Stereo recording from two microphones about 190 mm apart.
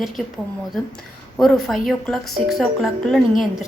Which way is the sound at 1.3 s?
5° left (ahead or behind).